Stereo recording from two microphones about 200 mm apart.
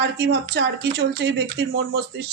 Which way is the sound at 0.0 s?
60° right (ahead or behind).